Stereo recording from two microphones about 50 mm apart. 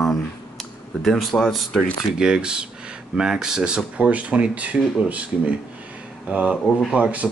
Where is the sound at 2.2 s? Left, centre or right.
Centre.